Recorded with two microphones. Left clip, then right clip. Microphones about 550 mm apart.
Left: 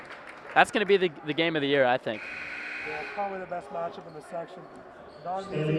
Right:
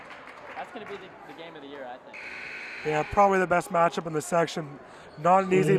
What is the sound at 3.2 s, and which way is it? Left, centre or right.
Speech, right.